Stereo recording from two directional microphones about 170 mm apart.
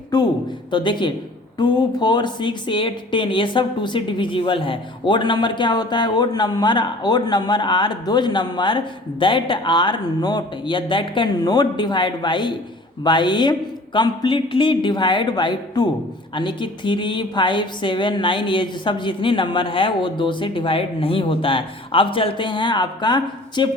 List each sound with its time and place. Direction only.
0.1 s speech: 25° left (ahead or behind)